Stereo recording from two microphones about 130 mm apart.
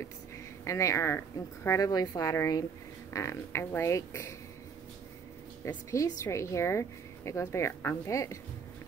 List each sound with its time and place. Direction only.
0.7 s a woman's voice: 25° left (ahead or behind)
5.6 s a woman's voice: 25° left (ahead or behind)